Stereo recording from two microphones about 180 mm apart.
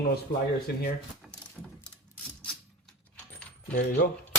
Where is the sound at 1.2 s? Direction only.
5° right (ahead or behind).